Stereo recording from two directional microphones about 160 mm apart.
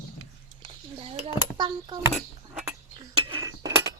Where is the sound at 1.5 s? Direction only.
30° right (ahead or behind).